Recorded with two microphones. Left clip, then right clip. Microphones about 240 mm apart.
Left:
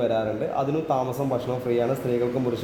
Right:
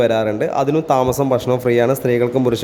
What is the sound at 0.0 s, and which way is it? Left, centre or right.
A man's voice, right.